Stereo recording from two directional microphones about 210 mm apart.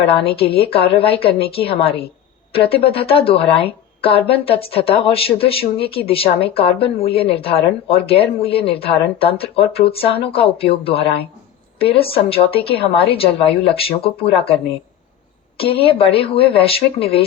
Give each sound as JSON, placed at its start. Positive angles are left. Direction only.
{"t": 0.1, "sound": "speech", "side_deg": 25}
{"t": 15.5, "sound": "speech", "side_deg": 25}